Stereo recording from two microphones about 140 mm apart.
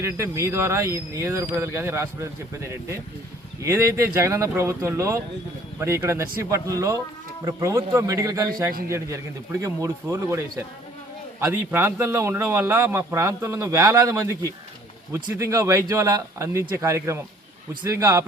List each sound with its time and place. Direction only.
0.0 s a man's voice: 20° right (ahead or behind)